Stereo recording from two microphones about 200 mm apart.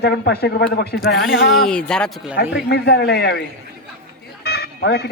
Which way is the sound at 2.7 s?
55° left (ahead or behind).